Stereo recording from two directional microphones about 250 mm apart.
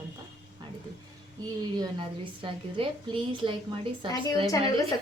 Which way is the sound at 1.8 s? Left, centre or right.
Centre.